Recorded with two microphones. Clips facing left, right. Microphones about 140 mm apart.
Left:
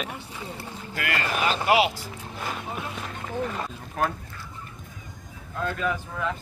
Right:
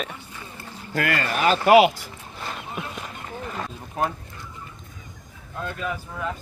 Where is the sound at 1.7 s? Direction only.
50° right (ahead or behind).